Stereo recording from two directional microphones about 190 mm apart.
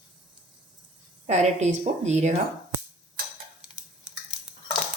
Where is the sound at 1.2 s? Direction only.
35° right (ahead or behind).